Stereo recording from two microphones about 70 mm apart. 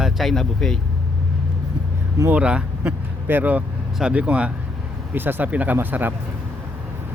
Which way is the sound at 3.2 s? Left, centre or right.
Right.